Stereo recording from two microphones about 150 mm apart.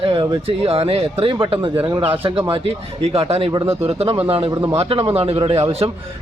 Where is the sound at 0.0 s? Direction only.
40° right (ahead or behind).